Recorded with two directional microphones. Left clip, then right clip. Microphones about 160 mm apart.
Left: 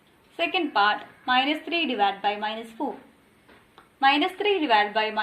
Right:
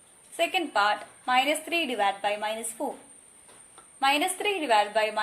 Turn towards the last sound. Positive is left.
turn(degrees=-30)  # may be behind; listen again after turning